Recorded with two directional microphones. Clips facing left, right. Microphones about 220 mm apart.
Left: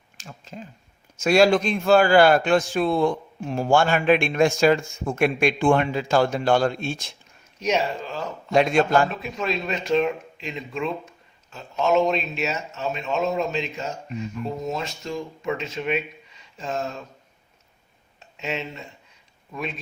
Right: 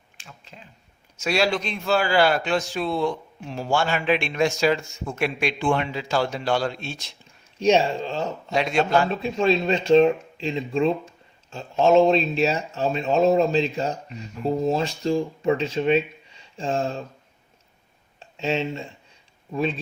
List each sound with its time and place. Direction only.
0.2 s a sound: 40° left (ahead or behind)
1.2 s a man's voice: 50° left (ahead or behind)
7.6 s speech: 30° right (ahead or behind)
8.5 s a man's voice: 50° left (ahead or behind)
9.0 s speech: 30° right (ahead or behind)
18.2 s speech: 30° right (ahead or behind)